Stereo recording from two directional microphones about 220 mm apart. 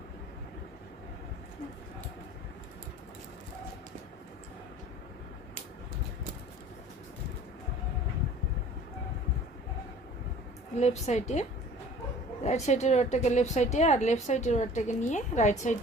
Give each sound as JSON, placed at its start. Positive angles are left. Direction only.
{"t": 10.8, "sound": "a woman's voice", "side_deg": 30}